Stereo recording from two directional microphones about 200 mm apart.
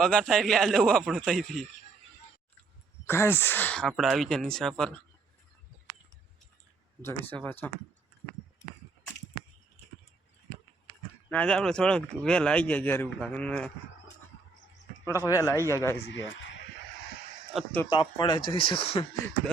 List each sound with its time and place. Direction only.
0.0 s speech: 5° left (ahead or behind)
3.1 s speech: 10° left (ahead or behind)
5.9 s a sound: 45° right (ahead or behind)
7.0 s a man's voice: 10° left (ahead or behind)
11.3 s speech: 5° left (ahead or behind)
15.0 s a man's voice: 15° left (ahead or behind)
16.0 s a sound: 65° left (ahead or behind)
17.5 s speech: 5° left (ahead or behind)
17.8 s speech: 25° left (ahead or behind)